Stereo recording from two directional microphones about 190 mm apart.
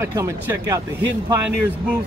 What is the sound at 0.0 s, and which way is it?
Speech, 15° right (ahead or behind).